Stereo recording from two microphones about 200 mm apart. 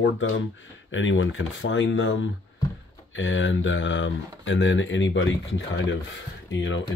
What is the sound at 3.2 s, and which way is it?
Speech, 75° left (ahead or behind).